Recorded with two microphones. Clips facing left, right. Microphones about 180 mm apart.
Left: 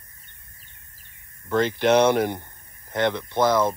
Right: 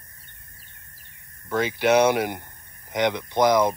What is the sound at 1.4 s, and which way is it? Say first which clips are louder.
Speech: left 1 dB; 5° right (ahead or behind).